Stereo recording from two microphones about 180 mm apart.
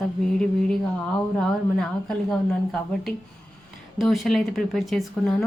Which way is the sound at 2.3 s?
Centre (ahead or behind).